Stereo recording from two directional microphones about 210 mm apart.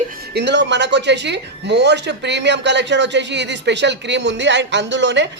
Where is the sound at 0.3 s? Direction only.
55° right (ahead or behind).